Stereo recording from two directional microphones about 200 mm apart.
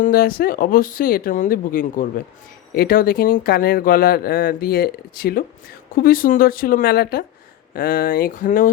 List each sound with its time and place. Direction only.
0.0 s speech: 45° left (ahead or behind)